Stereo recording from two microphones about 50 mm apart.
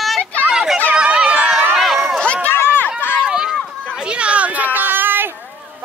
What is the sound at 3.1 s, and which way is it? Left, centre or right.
Run, centre.